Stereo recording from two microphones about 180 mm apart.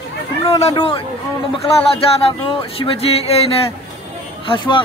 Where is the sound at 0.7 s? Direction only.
30° left (ahead or behind).